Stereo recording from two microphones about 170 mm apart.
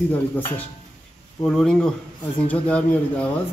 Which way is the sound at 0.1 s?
10° left (ahead or behind).